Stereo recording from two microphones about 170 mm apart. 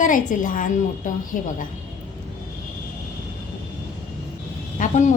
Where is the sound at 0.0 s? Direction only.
50° left (ahead or behind).